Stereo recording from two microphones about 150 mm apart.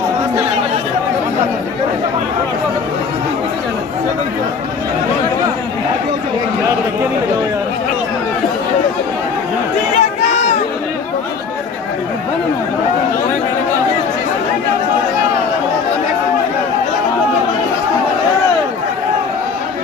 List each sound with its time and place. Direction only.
9.9 s run: 50° left (ahead or behind)